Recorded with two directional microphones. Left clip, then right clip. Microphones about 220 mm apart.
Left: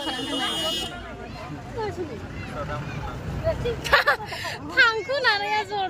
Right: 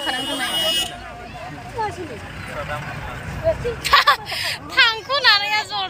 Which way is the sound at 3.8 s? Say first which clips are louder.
Right 5 dB; 40° left (ahead or behind).